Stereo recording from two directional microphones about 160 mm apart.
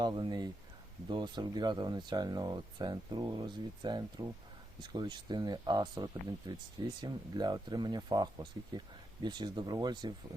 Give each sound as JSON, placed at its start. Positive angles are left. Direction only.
{"t": 0.0, "sound": "speech", "side_deg": -25}